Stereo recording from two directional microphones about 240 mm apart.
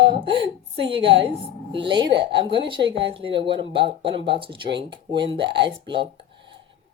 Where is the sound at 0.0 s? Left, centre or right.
Right.